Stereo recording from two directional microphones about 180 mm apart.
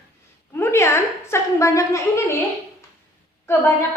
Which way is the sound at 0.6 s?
15° left (ahead or behind).